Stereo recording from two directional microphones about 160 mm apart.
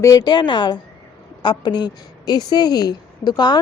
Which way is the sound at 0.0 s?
20° left (ahead or behind).